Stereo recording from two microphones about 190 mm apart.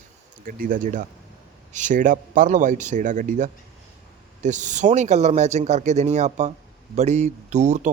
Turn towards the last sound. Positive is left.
turn(degrees=-40)  # may be behind; listen again after turning